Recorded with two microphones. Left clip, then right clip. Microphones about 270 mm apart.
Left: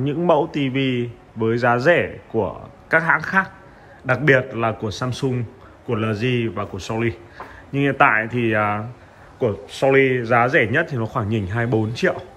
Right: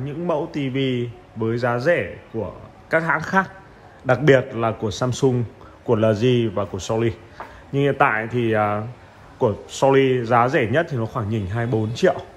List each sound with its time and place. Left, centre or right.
0.0 s a man's voice: centre